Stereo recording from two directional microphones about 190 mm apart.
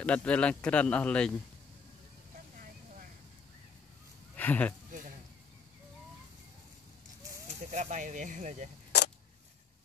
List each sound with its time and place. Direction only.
0.0 s speech: 5° left (ahead or behind)
4.4 s speech: 10° left (ahead or behind)
7.7 s speech: 40° right (ahead or behind)